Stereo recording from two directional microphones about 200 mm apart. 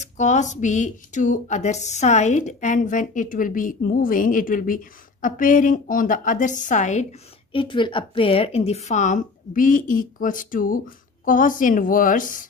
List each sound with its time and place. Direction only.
0.0 s speech: 35° left (ahead or behind)